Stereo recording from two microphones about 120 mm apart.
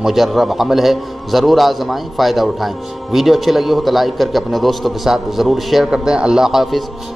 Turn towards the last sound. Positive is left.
turn(degrees=0)  # may be behind; listen again after turning